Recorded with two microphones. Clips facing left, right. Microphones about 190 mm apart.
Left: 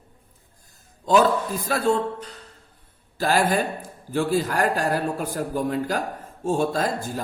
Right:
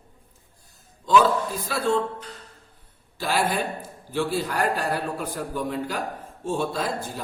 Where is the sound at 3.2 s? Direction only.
45° left (ahead or behind).